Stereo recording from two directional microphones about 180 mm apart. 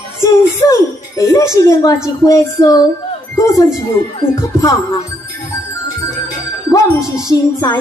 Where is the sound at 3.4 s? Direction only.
15° left (ahead or behind).